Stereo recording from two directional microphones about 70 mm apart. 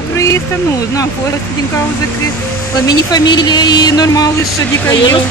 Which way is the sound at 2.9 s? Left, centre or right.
Left.